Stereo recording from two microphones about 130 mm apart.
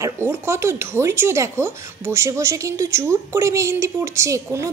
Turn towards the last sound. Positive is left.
turn(degrees=-25)  # may be behind; listen again after turning